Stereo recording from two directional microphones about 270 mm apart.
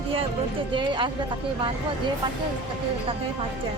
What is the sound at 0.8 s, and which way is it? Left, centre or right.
Speech, centre.